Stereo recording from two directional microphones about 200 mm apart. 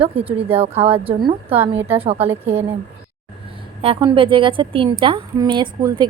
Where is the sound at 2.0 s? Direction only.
30° right (ahead or behind).